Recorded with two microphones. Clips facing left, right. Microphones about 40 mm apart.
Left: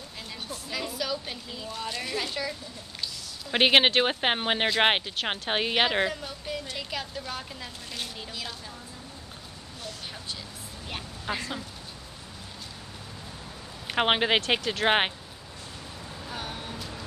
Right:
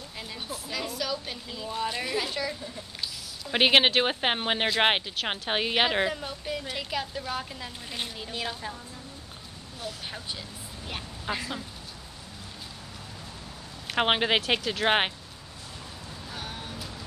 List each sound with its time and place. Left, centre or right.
0.3 s a sound: centre
1.7 s a woman's voice: centre
6.2 s a sound: centre
6.6 s a woman's voice: centre
8.3 s speech: right
10.9 s speech: centre
13.8 s speech: centre
16.3 s vehicle: centre